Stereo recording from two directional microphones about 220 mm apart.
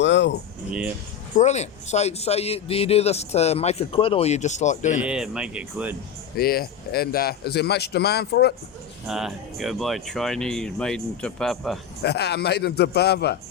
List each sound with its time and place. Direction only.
0.0 s speech: 55° left (ahead or behind)
1.4 s a man's voice: 30° left (ahead or behind)
4.9 s speech: 5° right (ahead or behind)
6.3 s speech: 45° left (ahead or behind)
9.0 s speech: centre (ahead or behind)
12.0 s speech: 50° left (ahead or behind)